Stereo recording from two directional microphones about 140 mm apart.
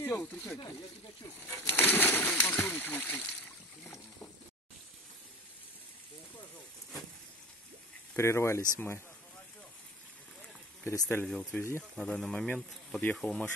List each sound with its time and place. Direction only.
0.0 s speech: 15° left (ahead or behind)
1.5 s speech: 15° left (ahead or behind)
8.2 s speech: 20° left (ahead or behind)
10.8 s speech: 15° left (ahead or behind)
11.2 s speech: 5° left (ahead or behind)